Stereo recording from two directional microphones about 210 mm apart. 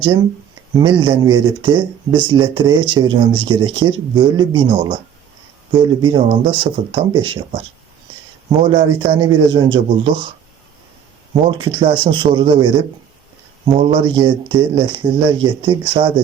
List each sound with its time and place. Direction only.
0.0 s speech: 25° right (ahead or behind)
8.4 s speech: 25° right (ahead or behind)
11.3 s speech: 25° right (ahead or behind)